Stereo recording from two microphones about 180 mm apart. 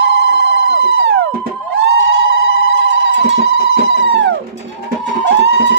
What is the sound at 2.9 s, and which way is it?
Music, 90° right.